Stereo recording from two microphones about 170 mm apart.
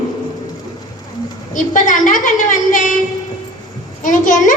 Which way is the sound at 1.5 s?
50° left (ahead or behind).